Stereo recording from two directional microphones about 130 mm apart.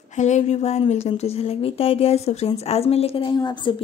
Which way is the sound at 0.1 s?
65° left (ahead or behind).